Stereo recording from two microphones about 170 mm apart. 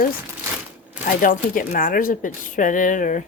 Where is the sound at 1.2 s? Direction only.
50° left (ahead or behind).